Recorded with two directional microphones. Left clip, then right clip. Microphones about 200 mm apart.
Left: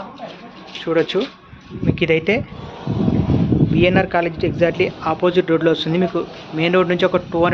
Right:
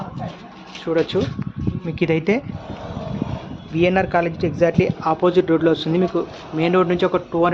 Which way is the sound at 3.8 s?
5° right (ahead or behind).